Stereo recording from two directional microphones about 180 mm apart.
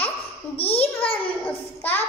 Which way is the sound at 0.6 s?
35° left (ahead or behind).